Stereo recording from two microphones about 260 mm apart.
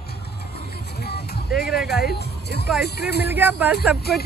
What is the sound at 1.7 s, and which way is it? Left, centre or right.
Speech, centre.